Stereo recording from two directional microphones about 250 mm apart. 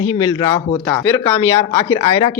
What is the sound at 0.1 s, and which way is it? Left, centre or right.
Speech, centre.